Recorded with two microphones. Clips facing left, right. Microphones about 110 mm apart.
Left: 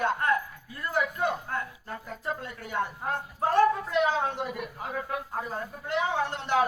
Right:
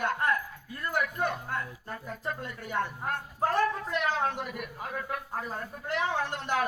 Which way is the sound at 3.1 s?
20° left (ahead or behind).